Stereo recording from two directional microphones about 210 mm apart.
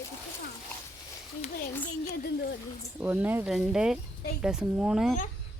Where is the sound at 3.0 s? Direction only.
10° right (ahead or behind).